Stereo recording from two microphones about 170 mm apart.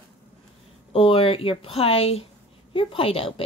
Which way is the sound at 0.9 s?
30° left (ahead or behind).